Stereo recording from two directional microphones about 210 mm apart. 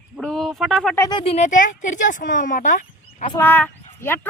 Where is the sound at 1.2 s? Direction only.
30° left (ahead or behind).